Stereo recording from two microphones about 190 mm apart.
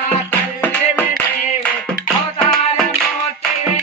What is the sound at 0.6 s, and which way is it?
Music, 10° left (ahead or behind).